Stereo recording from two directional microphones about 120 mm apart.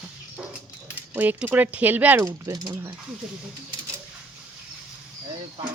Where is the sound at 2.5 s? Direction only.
30° right (ahead or behind).